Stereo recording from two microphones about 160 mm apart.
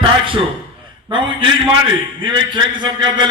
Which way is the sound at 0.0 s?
35° right (ahead or behind).